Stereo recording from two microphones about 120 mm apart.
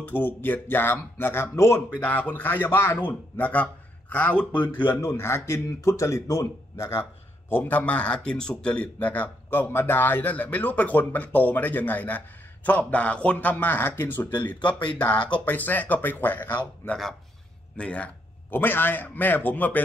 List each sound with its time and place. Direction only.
0.0 s speech: 15° left (ahead or behind)
5.0 s a man's voice: 20° left (ahead or behind)